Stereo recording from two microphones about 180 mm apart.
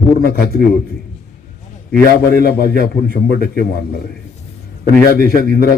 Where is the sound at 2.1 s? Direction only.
60° left (ahead or behind).